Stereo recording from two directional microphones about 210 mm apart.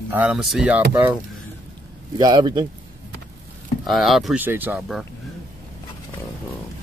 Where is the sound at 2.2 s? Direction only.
20° right (ahead or behind).